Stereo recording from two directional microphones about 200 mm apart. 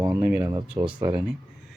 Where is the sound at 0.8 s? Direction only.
5° right (ahead or behind).